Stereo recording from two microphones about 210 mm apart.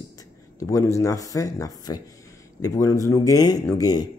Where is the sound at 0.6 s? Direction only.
15° left (ahead or behind).